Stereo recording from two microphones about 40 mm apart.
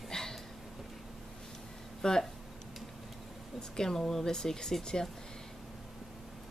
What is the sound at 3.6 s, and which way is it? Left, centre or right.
Speech, centre.